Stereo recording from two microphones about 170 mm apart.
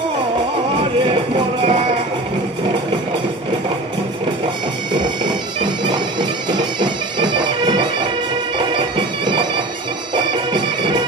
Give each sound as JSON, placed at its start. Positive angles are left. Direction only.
{"t": 1.0, "sound": "music", "side_deg": -30}
{"t": 5.2, "sound": "bagpipes", "side_deg": -30}